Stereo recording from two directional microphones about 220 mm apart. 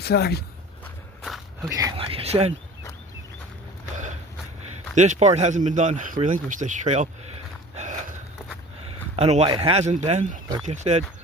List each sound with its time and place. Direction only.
0.0 s speech: 45° left (ahead or behind)
1.2 s walk: centre (ahead or behind)
1.7 s speech: 20° right (ahead or behind)
4.9 s speech: 35° right (ahead or behind)
7.8 s a sound: 35° right (ahead or behind)
9.1 s speech: 30° right (ahead or behind)